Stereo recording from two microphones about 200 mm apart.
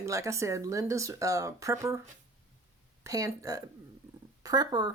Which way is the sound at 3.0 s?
15° right (ahead or behind).